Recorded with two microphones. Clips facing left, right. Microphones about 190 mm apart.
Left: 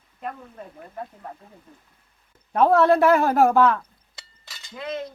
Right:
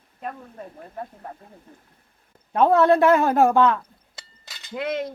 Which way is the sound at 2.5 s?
Centre (ahead or behind).